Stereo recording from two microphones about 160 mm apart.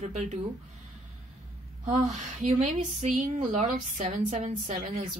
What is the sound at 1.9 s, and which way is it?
Speech, 50° right (ahead or behind).